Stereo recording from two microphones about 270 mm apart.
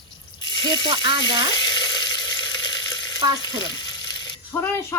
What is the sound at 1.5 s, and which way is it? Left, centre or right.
Frying, centre.